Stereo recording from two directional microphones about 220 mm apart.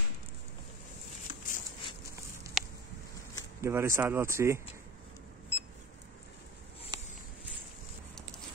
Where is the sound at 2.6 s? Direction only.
Centre (ahead or behind).